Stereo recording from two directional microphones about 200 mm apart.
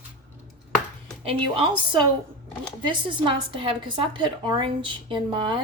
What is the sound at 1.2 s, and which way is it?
Speech, 25° right (ahead or behind).